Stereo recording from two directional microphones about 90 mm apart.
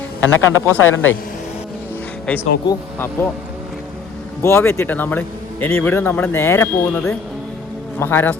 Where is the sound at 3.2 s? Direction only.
25° left (ahead or behind).